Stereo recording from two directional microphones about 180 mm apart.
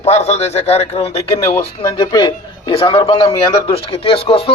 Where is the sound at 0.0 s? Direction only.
35° left (ahead or behind).